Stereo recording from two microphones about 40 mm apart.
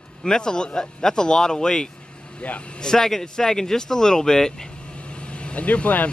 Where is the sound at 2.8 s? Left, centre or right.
Centre.